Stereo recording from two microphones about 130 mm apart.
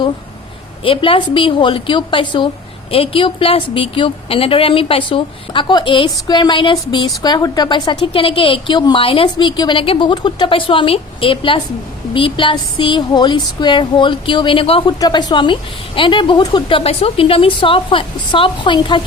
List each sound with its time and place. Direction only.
0.9 s a woman's voice: 45° left (ahead or behind)